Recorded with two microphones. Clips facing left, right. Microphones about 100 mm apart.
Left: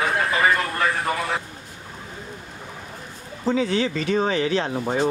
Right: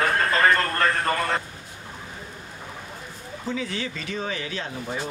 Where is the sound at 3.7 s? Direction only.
55° left (ahead or behind).